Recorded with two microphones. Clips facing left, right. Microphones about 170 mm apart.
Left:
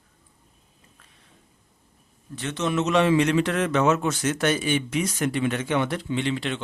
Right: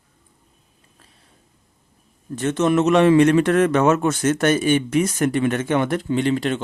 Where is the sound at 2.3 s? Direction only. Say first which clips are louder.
Right 7 dB; 50° right (ahead or behind).